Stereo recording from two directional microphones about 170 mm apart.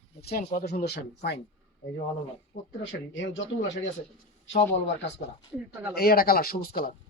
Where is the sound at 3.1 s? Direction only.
90° left.